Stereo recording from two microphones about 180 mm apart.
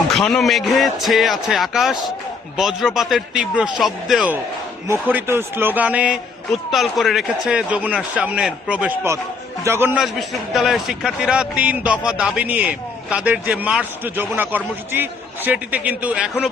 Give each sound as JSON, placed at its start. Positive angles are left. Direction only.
{"t": 0.1, "sound": "speech", "side_deg": 5}
{"t": 4.9, "sound": "a man's voice", "side_deg": -10}
{"t": 10.0, "sound": "a man's voice", "side_deg": 0}